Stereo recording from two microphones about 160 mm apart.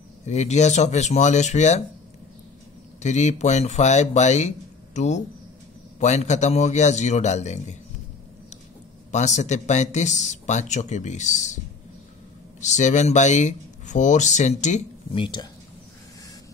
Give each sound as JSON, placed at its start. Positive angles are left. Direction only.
{"t": 0.3, "sound": "speech", "side_deg": 45}
{"t": 3.0, "sound": "speech", "side_deg": 45}
{"t": 9.1, "sound": "speech", "side_deg": 45}
{"t": 15.1, "sound": "speech", "side_deg": 30}